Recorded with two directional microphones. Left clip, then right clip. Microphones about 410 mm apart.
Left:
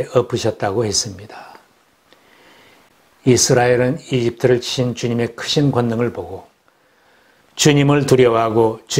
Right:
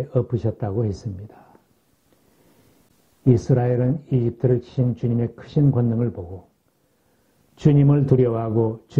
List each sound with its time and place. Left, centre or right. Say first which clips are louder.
0.0 s speech: left 8 dB; centre
3.3 s speech: left 8 dB; centre
7.5 s speech: left 6 dB; centre
8.5 s speech: left 7 dB; centre